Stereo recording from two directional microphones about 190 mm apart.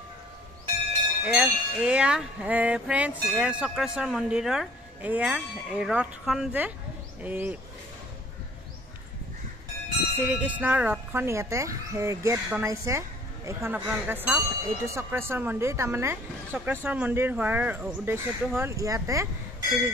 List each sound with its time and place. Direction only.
1.2 s music: 5° right (ahead or behind)
7.2 s speech: 10° right (ahead or behind)
10.1 s speech: 10° right (ahead or behind)